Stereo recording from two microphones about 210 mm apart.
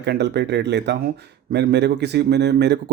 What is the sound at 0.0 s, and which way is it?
Speech, 55° right (ahead or behind).